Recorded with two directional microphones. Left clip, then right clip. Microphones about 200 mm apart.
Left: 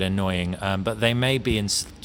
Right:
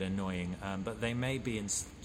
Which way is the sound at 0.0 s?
40° left (ahead or behind).